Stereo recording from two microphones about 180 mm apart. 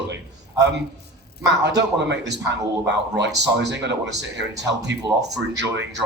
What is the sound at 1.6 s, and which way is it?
Speech, 70° right (ahead or behind).